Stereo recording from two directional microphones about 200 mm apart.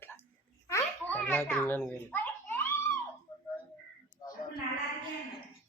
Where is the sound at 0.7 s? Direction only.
10° left (ahead or behind).